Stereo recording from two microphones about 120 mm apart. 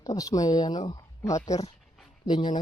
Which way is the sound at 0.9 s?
25° left (ahead or behind).